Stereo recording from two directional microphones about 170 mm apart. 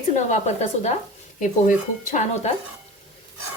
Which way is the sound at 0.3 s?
40° left (ahead or behind).